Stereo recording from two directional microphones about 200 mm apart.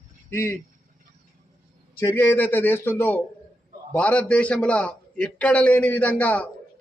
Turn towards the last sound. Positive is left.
turn(degrees=5)  # may be behind; listen again after turning